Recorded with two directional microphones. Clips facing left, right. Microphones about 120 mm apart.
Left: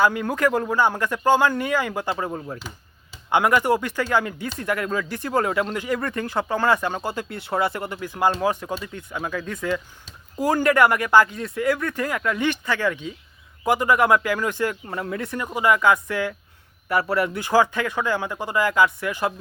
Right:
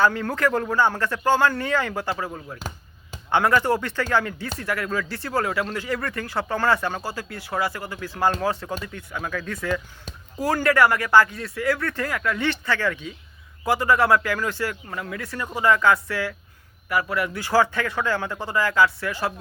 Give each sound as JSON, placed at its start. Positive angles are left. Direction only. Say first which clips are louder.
{"t": 0.0, "sound": "speech", "louder": "left 1 dB", "side_deg": 15}
{"t": 2.6, "sound": "a sound", "louder": "right 3 dB", "side_deg": -45}
{"t": 3.2, "sound": "speech", "louder": "left 1 dB", "side_deg": 15}
{"t": 16.9, "sound": "speech", "louder": "left 3 dB", "side_deg": 30}